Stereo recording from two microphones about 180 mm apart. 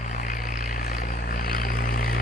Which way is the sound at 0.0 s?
45° left (ahead or behind).